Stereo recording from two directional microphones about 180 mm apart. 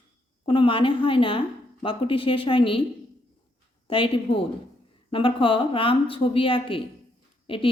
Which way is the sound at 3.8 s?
30° left (ahead or behind).